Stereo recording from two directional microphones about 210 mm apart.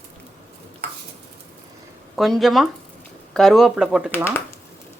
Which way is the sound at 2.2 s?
Centre (ahead or behind).